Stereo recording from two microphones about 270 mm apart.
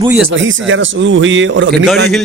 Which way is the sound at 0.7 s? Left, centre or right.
Right.